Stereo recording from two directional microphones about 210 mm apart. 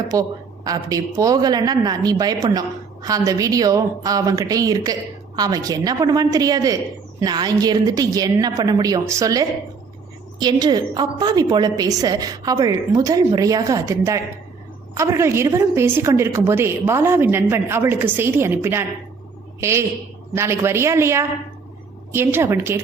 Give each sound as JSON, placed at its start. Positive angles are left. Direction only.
{"t": 0.1, "sound": "a woman's voice", "side_deg": -15}